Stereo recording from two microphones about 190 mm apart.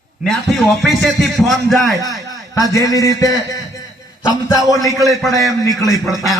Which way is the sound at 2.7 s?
20° left (ahead or behind).